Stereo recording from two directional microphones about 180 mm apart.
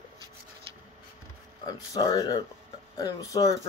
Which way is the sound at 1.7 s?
20° left (ahead or behind).